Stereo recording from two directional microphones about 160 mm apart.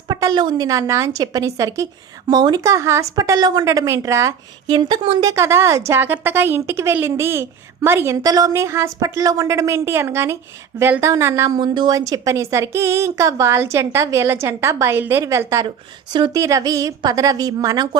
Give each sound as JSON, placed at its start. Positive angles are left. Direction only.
{"t": 0.1, "sound": "a woman's voice", "side_deg": -25}
{"t": 5.3, "sound": "a woman's voice", "side_deg": -15}